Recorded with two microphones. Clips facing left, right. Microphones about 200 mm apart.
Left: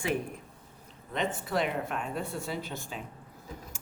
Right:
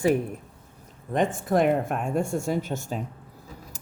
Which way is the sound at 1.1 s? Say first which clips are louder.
Right 8 dB; 50° right (ahead or behind).